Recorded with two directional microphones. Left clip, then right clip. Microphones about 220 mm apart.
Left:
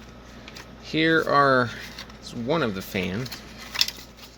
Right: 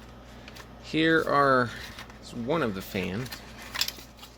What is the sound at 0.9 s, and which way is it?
Speech, centre (ahead or behind).